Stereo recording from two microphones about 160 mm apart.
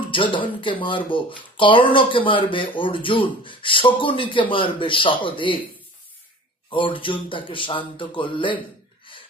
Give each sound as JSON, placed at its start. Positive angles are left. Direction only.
{"t": 0.1, "sound": "speech", "side_deg": 30}
{"t": 6.7, "sound": "speech", "side_deg": 30}